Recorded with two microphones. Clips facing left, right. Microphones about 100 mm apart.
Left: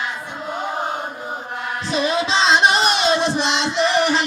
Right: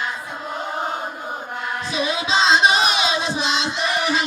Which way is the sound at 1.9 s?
45° left (ahead or behind).